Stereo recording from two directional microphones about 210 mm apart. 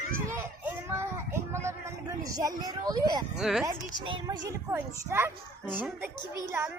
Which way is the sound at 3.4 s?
Centre (ahead or behind).